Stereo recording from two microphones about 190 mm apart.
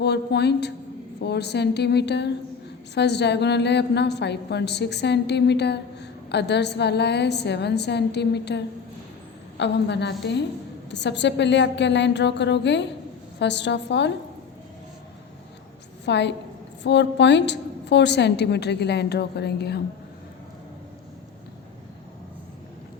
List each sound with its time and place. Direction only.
0.0 s a woman's voice: 60° left (ahead or behind)
16.0 s a woman's voice: 65° left (ahead or behind)